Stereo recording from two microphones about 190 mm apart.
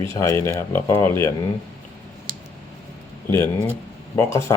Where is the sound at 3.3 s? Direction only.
10° left (ahead or behind).